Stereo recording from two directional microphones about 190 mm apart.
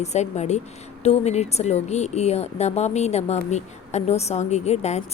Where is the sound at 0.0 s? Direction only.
35° left (ahead or behind).